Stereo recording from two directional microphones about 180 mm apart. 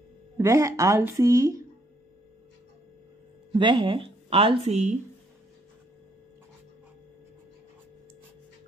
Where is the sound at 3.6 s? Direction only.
25° right (ahead or behind).